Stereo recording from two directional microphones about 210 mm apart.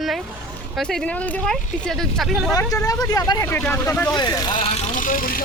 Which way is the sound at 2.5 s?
15° left (ahead or behind).